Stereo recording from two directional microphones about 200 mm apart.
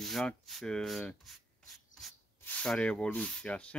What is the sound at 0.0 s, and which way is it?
Speech, centre (ahead or behind).